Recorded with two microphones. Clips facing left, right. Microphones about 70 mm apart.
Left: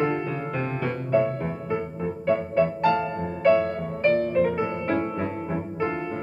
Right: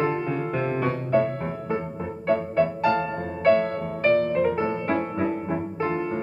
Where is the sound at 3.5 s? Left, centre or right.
Right.